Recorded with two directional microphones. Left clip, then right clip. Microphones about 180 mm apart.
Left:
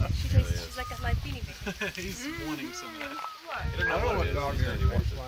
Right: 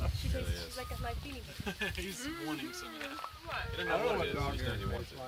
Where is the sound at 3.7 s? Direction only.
50° right (ahead or behind).